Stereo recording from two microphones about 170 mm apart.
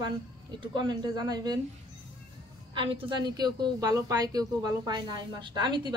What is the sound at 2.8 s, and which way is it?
A woman's voice, 30° right (ahead or behind).